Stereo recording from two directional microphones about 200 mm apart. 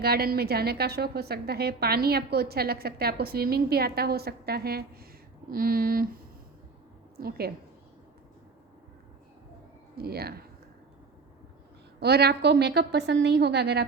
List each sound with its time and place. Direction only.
0.0 s a woman's voice: 50° right (ahead or behind)
7.2 s a woman's voice: 50° right (ahead or behind)
10.0 s a woman's voice: 50° right (ahead or behind)
11.9 s a woman's voice: 55° right (ahead or behind)